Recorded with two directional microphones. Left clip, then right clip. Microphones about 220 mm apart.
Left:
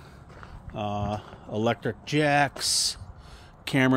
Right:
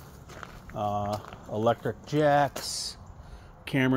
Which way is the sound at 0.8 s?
25° left (ahead or behind).